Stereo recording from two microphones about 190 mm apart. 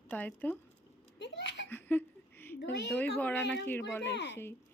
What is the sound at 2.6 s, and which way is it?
Speech, 65° left (ahead or behind).